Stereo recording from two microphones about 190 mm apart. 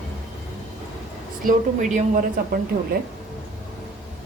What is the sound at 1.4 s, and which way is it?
Speech, 40° right (ahead or behind).